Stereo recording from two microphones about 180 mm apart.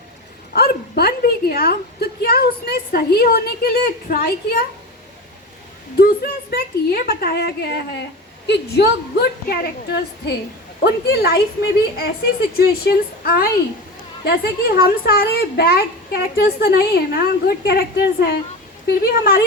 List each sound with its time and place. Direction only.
0.5 s bow-wow: 60° left (ahead or behind)
6.0 s a child's voice: 60° left (ahead or behind)